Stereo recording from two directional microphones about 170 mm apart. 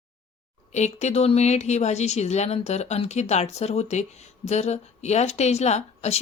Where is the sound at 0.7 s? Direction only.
40° left (ahead or behind).